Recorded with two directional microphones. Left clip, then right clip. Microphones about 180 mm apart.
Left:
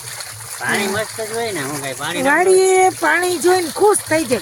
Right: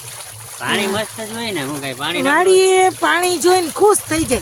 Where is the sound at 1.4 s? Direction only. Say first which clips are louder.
Even; 55° right (ahead or behind).